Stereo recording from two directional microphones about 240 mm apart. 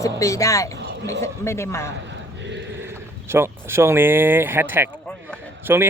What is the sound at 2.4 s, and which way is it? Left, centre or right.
Chant, right.